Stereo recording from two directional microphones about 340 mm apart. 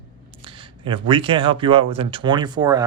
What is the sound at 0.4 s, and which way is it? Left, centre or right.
Speech, centre.